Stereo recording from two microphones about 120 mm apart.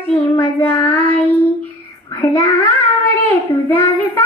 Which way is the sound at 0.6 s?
15° left (ahead or behind).